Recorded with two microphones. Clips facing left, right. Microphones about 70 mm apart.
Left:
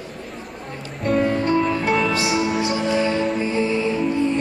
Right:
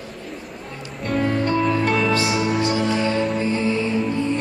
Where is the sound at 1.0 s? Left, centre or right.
Centre.